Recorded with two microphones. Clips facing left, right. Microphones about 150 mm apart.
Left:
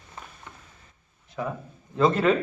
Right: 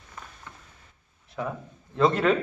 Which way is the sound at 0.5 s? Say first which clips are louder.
Even; 15° left (ahead or behind).